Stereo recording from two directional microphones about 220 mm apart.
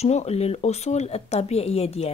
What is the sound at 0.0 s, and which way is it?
Speech, 30° left (ahead or behind).